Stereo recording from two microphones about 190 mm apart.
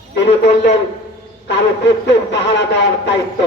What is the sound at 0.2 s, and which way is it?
Speech, 65° left (ahead or behind).